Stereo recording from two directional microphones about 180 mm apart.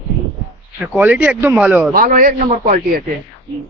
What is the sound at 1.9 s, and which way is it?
Speech, 50° right (ahead or behind).